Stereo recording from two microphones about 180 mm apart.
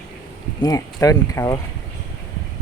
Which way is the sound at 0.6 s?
20° left (ahead or behind).